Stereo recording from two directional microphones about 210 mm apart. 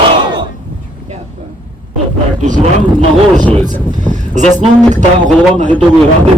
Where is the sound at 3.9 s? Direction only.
35° right (ahead or behind).